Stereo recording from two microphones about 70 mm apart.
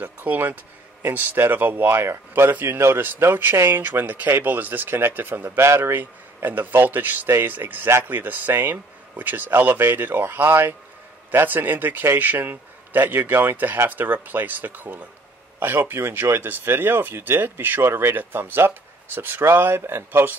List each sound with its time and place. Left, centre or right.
0.0 s speech: right